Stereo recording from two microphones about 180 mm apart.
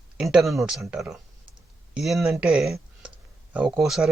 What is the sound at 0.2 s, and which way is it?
Speech, centre (ahead or behind).